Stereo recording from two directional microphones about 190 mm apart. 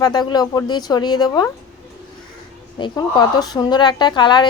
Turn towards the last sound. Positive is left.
turn(degrees=25)  # may be behind; listen again after turning